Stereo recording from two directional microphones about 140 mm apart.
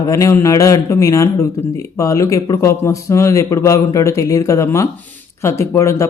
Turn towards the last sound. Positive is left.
turn(degrees=20)  # may be behind; listen again after turning